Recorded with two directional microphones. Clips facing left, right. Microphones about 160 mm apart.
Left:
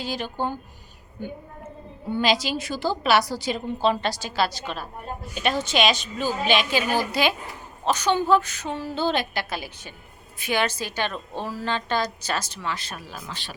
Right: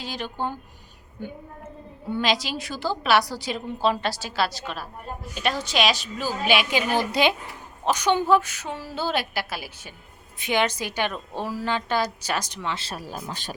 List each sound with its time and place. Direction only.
0.0 s a woman's voice: centre (ahead or behind)
2.0 s a woman's voice: centre (ahead or behind)
10.3 s a woman's voice: 20° right (ahead or behind); by 13.5 s 40° right (ahead or behind)